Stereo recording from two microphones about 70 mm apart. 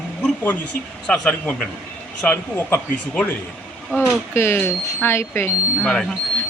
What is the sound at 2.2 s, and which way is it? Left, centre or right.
Speech, left.